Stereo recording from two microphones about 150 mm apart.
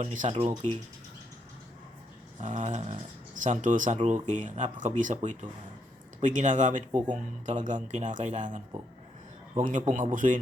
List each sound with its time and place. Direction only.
0.0 s speech: 55° right (ahead or behind)
2.4 s speech: 50° right (ahead or behind)